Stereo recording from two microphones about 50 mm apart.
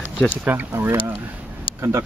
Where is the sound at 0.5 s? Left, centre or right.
Right.